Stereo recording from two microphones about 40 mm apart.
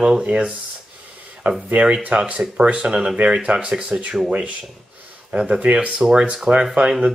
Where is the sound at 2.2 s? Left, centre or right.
Right.